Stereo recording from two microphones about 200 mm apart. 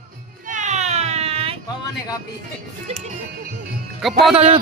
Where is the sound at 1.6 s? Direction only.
20° left (ahead or behind).